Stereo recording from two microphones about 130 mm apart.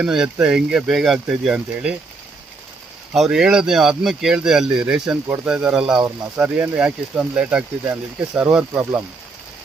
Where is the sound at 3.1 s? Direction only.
5° right (ahead or behind).